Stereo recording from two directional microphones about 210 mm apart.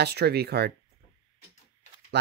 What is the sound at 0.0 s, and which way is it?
Speech, 50° right (ahead or behind).